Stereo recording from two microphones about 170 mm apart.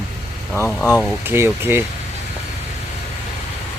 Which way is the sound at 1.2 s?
10° right (ahead or behind).